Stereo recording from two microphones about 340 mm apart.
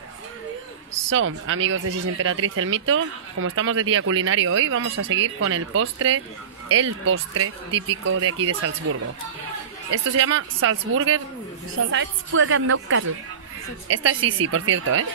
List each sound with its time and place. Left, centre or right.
1.1 s speech: right